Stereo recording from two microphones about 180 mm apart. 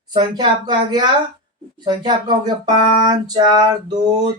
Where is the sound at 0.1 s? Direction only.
25° right (ahead or behind).